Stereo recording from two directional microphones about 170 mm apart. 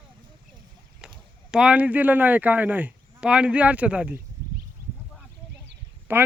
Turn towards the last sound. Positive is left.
turn(degrees=-15)  # may be behind; listen again after turning